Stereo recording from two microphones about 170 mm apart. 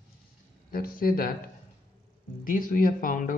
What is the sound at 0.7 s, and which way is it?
Speech, 60° left (ahead or behind).